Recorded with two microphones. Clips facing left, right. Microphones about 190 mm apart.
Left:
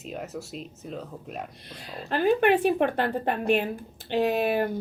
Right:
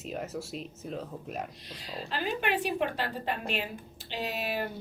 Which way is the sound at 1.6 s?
55° left (ahead or behind).